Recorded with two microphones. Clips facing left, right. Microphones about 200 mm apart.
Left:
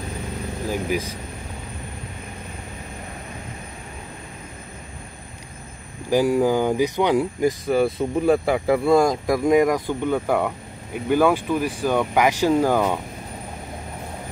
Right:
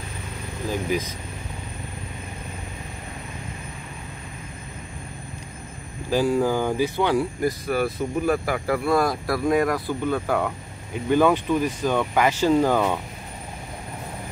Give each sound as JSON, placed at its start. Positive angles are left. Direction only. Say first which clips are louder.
{"t": 0.7, "sound": "speech", "louder": "even", "side_deg": 10}
{"t": 6.0, "sound": "speech", "louder": "left 3 dB", "side_deg": 15}